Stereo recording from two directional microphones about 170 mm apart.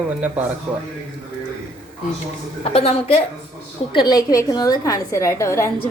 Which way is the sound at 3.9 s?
25° left (ahead or behind).